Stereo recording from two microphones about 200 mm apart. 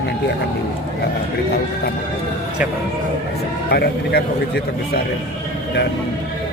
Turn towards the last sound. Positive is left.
turn(degrees=55)  # may be behind; listen again after turning